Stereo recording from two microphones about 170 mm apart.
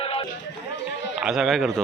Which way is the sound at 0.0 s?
30° left (ahead or behind).